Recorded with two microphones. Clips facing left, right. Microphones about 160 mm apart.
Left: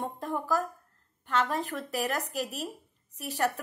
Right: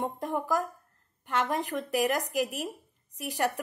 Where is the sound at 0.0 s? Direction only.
15° right (ahead or behind).